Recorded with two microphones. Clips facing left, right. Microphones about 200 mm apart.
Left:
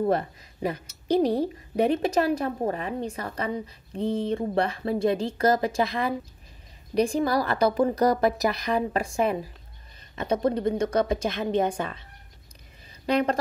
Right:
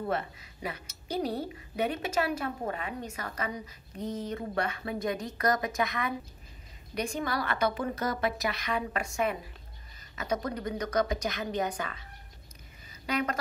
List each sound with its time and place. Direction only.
0.0 s a woman's voice: 40° left (ahead or behind)
13.0 s speech: 35° left (ahead or behind)